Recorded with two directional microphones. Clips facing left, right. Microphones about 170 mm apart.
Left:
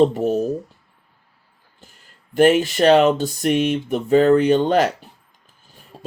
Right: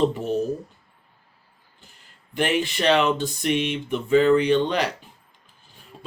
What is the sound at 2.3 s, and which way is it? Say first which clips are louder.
Speech: left 9 dB; 45° left (ahead or behind).